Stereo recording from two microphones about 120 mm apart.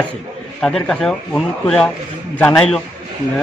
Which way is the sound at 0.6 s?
5° left (ahead or behind).